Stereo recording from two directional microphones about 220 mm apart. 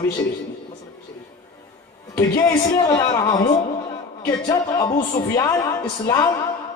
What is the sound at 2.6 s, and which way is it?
Speech, 15° left (ahead or behind).